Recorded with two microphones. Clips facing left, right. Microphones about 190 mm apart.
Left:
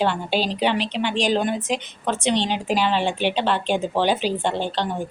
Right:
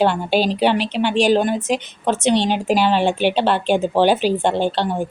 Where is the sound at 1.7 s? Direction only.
45° right (ahead or behind).